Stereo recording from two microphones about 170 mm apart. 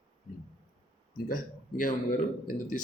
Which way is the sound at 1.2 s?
55° left (ahead or behind).